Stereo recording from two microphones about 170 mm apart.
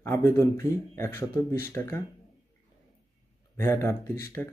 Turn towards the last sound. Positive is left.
turn(degrees=10)  # may be behind; listen again after turning